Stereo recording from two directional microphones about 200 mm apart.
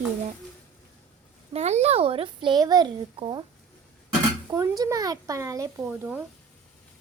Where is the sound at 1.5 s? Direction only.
35° right (ahead or behind).